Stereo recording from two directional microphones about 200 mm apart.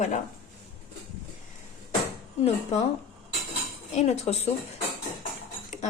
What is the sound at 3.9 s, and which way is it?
Speech, 35° left (ahead or behind).